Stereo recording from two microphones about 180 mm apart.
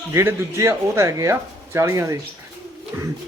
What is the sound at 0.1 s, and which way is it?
Speech, 15° right (ahead or behind).